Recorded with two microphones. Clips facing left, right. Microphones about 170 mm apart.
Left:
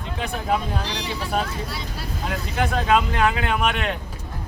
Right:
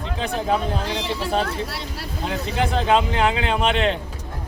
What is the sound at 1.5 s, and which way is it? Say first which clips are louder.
Speech: right 3 dB; 70° right (ahead or behind).